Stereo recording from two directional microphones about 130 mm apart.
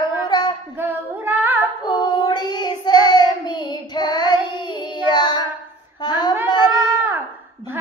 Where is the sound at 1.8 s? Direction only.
35° left (ahead or behind).